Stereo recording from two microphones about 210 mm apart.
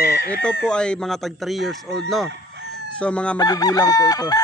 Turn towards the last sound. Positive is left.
turn(degrees=20)  # may be behind; listen again after turning